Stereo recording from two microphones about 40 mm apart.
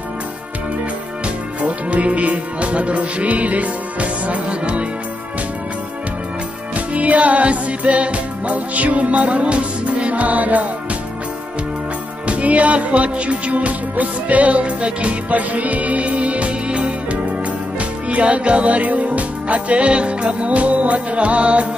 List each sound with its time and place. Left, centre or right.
1.6 s music: right
6.9 s music: right
12.3 s music: right